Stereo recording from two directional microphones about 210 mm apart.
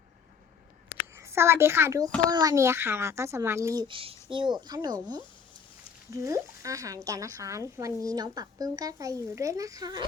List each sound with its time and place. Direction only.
1.1 s a child's voice: 10° right (ahead or behind)